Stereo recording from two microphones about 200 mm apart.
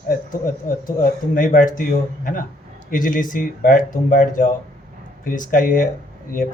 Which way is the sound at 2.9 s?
40° left (ahead or behind).